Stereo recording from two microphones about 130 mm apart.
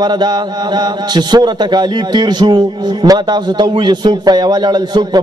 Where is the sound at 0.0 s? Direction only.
35° right (ahead or behind).